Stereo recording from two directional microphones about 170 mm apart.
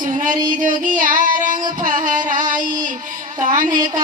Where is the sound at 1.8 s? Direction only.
50° right (ahead or behind).